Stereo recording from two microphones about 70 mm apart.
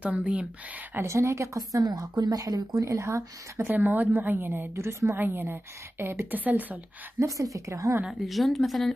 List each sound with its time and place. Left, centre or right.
0.0 s a woman's voice: centre
1.0 s a woman's voice: right
1.6 s a woman's voice: right
3.6 s a woman's voice: right
7.2 s a woman's voice: right
8.1 s speech: centre